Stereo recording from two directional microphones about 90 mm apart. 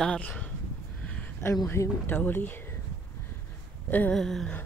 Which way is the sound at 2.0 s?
20° left (ahead or behind).